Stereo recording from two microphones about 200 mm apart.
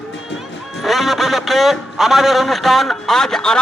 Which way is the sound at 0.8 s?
Centre (ahead or behind).